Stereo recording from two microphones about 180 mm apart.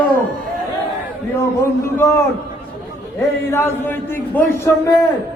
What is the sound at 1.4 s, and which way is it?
Speech, 15° left (ahead or behind).